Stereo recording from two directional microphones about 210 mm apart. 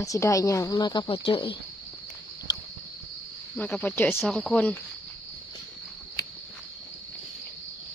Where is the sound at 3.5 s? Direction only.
5° left (ahead or behind).